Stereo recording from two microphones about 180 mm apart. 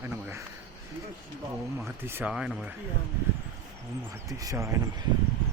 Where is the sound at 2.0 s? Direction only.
10° right (ahead or behind).